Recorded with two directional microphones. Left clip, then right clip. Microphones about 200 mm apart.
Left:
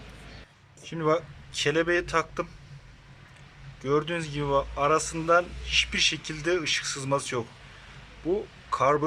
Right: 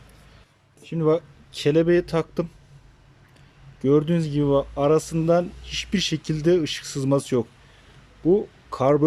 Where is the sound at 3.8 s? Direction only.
25° right (ahead or behind).